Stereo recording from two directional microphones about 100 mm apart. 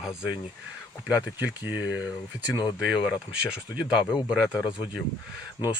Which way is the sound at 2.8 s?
5° right (ahead or behind).